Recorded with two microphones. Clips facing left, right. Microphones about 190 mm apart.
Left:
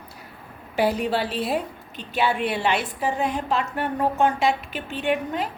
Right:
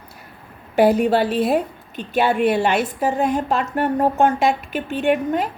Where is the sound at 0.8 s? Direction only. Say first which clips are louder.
Right 7 dB; 50° right (ahead or behind).